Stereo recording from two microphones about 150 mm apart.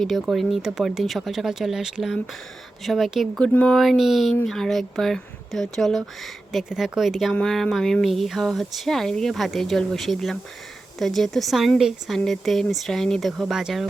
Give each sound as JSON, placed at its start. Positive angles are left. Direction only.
{"t": 0.0, "sound": "speech", "side_deg": 0}